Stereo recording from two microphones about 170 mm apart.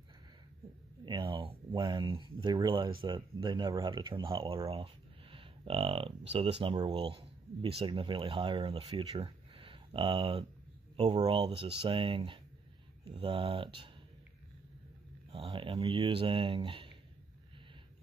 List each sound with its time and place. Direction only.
1.0 s speech: 30° right (ahead or behind)
15.3 s speech: 30° right (ahead or behind)